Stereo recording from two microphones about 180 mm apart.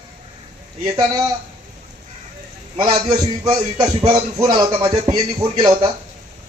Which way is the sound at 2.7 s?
20° right (ahead or behind).